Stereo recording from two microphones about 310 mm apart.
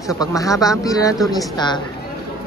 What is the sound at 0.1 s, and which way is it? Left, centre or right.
Speech, centre.